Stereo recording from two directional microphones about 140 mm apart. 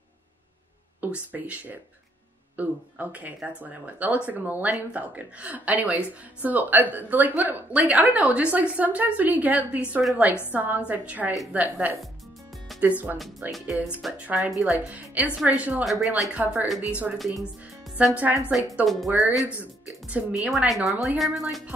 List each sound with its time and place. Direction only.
1.1 s a woman's voice: 10° right (ahead or behind)
13.5 s a woman's voice: centre (ahead or behind)
17.9 s a woman's voice: 10° right (ahead or behind)
19.2 s speech: 20° left (ahead or behind)
19.6 s music: 10° right (ahead or behind)
20.4 s speech: centre (ahead or behind)